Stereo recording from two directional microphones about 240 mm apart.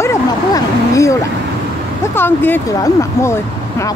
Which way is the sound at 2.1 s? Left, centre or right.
Centre.